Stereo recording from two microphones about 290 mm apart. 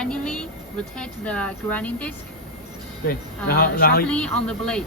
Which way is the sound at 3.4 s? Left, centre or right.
Left.